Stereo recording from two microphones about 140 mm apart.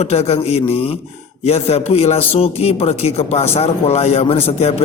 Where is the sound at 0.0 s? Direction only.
50° left (ahead or behind).